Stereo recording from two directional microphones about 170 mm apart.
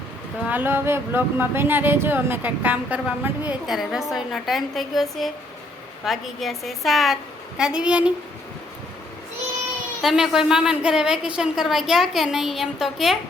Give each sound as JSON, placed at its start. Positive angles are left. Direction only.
{"t": 0.4, "sound": "a woman's voice", "side_deg": -10}
{"t": 10.0, "sound": "a woman's voice", "side_deg": 0}